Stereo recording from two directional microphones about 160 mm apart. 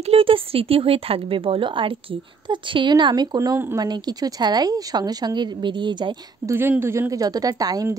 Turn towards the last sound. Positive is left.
turn(degrees=-25)  # may be behind; listen again after turning